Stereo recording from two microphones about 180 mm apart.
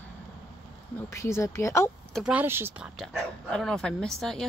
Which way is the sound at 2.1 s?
5° right (ahead or behind).